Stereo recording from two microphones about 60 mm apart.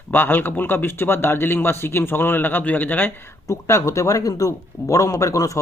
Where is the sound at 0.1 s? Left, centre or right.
Left.